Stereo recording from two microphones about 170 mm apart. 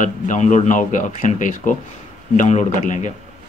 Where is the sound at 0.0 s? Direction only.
45° left (ahead or behind).